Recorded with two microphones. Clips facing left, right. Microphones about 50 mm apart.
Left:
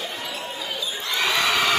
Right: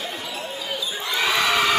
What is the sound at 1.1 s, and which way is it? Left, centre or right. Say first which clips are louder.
Crowd: right 1 dB; centre.